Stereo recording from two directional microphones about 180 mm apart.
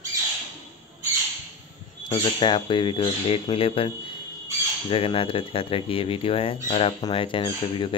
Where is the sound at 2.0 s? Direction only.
25° left (ahead or behind).